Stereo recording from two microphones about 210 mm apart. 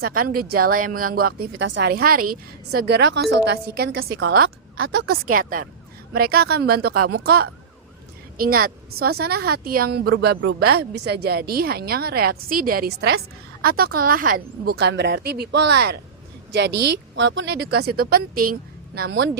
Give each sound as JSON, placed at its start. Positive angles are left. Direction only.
{"t": 0.0, "sound": "a woman's voice", "side_deg": -45}
{"t": 4.8, "sound": "a woman's voice", "side_deg": -90}
{"t": 5.0, "sound": "a woman's voice", "side_deg": -40}
{"t": 8.4, "sound": "a woman's voice", "side_deg": -45}
{"t": 17.2, "sound": "a woman's voice", "side_deg": -60}